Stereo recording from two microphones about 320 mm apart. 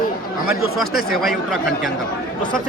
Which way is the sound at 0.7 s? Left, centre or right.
Centre.